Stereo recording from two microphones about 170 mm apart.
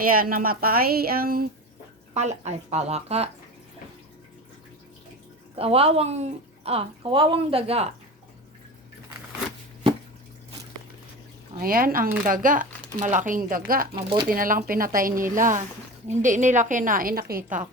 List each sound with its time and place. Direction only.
0.0 s a woman's voice: 55° right (ahead or behind)
2.1 s speech: 40° right (ahead or behind)
5.5 s speech: 35° right (ahead or behind)
11.6 s a woman's voice: 55° right (ahead or behind)
13.9 s speech: 30° right (ahead or behind)
14.3 s a woman's voice: 55° right (ahead or behind)